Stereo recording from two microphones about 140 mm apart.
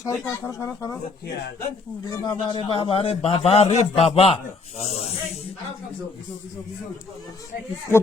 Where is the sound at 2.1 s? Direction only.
35° left (ahead or behind).